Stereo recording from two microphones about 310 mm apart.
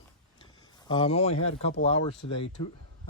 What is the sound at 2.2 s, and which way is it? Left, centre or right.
Speech, left.